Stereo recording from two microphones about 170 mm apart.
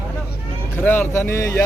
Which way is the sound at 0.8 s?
10° left (ahead or behind).